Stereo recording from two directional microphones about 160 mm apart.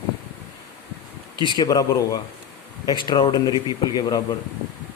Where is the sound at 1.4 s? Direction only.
25° left (ahead or behind).